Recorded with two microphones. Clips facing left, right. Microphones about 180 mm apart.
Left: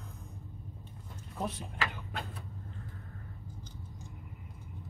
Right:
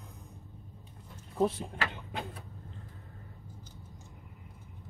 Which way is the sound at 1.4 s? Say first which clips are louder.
Right 3 dB; 25° right (ahead or behind).